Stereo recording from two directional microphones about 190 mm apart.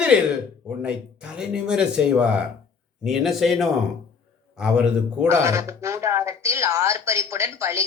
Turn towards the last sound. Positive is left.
turn(degrees=-15)  # may be behind; listen again after turning